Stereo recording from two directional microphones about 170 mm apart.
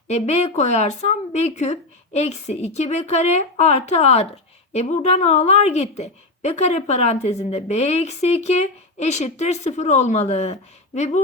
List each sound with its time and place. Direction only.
0.1 s a woman's voice: 40° left (ahead or behind)